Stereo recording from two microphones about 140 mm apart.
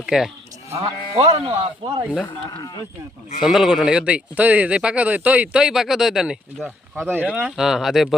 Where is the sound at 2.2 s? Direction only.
30° left (ahead or behind).